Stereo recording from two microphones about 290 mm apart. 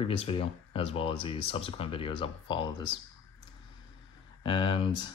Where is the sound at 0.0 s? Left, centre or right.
Centre.